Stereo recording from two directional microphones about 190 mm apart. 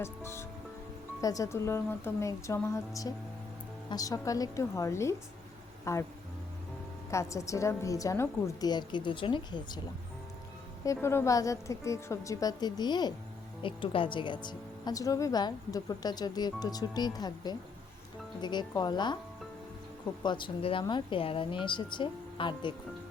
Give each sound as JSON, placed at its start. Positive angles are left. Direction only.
{"t": 0.0, "sound": "a woman's voice", "side_deg": 15}
{"t": 7.1, "sound": "a woman's voice", "side_deg": 15}
{"t": 10.8, "sound": "a woman's voice", "side_deg": 15}
{"t": 20.2, "sound": "speech", "side_deg": 25}